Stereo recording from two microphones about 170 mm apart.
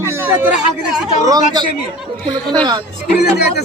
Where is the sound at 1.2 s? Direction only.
20° right (ahead or behind).